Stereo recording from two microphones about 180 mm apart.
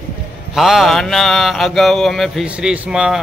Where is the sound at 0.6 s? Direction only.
Centre (ahead or behind).